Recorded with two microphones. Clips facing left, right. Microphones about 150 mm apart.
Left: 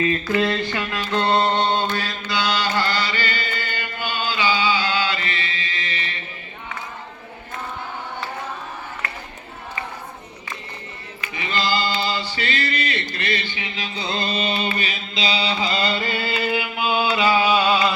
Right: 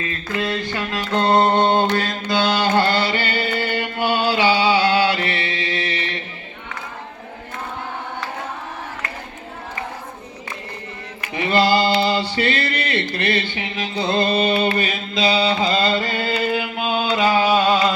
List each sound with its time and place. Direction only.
0.7 s mantra: 40° right (ahead or behind); by 6.1 s 70° right (ahead or behind)
11.2 s mantra: 55° right (ahead or behind)